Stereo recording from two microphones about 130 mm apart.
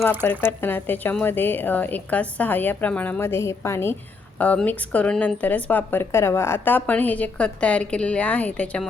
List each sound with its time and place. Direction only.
0.3 s a woman's voice: 15° left (ahead or behind)